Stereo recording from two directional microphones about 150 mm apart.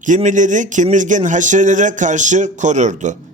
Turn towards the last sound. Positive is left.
turn(degrees=-55)  # may be behind; listen again after turning